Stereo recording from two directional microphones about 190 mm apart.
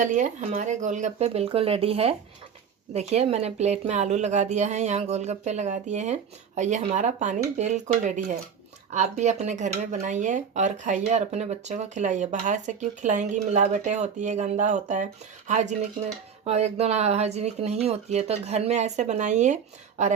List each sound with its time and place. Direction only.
0.0 s speech: 40° right (ahead or behind)